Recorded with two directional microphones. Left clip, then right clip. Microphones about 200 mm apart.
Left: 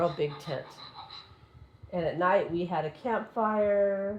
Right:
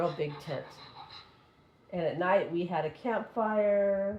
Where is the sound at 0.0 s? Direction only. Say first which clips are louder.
Left 3 dB; 30° left (ahead or behind).